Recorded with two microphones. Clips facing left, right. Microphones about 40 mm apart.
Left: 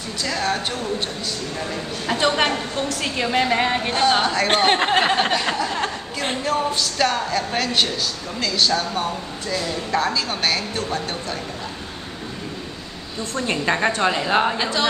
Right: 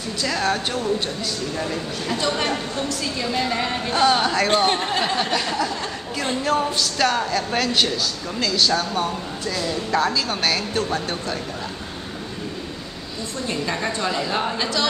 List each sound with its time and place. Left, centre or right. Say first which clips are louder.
0.2 s a woman's voice: right 1 dB; centre
2.1 s a woman's voice: left 4 dB; left
4.1 s a woman's voice: even; centre
4.6 s a woman's voice: left 4 dB; left
6.4 s a woman's voice: right 1 dB; centre
13.5 s a woman's voice: left 5 dB; left; by 14.9 s centre